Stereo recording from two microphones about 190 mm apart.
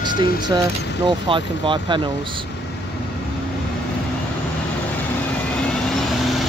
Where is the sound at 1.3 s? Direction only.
25° right (ahead or behind).